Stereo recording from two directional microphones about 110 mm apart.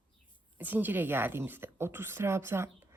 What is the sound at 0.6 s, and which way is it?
Speech, 15° right (ahead or behind).